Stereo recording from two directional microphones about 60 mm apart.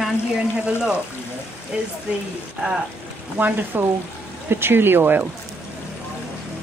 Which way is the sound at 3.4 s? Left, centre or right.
Right.